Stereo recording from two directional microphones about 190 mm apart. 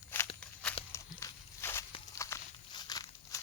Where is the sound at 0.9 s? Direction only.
15° left (ahead or behind).